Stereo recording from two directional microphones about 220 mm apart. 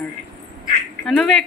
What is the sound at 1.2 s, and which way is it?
Speech, 5° left (ahead or behind).